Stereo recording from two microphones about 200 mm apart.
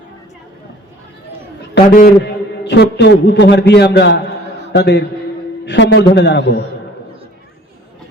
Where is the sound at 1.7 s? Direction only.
50° left (ahead or behind).